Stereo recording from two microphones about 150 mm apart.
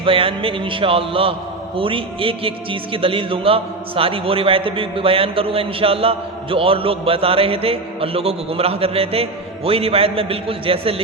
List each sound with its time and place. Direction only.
0.0 s a man's voice: 35° right (ahead or behind)